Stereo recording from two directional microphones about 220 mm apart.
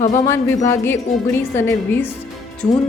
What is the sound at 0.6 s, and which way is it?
A woman's voice, 10° left (ahead or behind).